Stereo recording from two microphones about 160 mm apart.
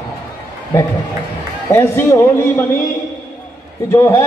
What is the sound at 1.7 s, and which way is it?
Speech, 15° left (ahead or behind).